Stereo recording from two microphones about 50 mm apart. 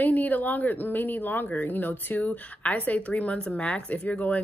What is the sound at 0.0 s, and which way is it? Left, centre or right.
A woman's voice, left.